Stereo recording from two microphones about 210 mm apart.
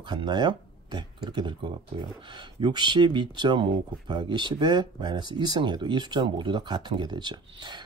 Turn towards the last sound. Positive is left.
turn(degrees=-20)  # may be behind; listen again after turning